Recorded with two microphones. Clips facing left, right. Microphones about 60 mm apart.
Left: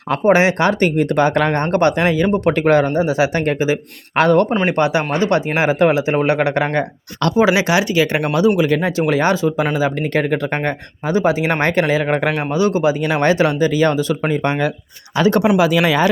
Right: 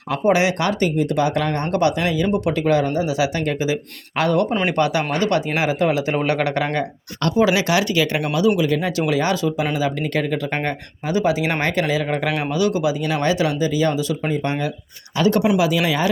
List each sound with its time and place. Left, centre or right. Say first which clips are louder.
0.1 s speech: left 4 dB; left
0.9 s speech: left 4 dB; left
4.6 s speech: left 3 dB; left
8.2 s speech: left 3 dB; left
13.0 s speech: left 5 dB; left